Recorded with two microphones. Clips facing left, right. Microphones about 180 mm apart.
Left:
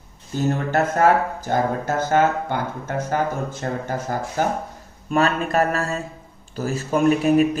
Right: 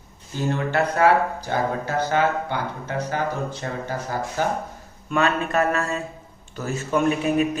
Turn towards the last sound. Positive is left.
turn(degrees=35)  # may be behind; listen again after turning